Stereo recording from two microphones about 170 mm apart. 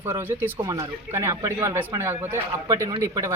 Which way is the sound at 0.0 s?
15° right (ahead or behind).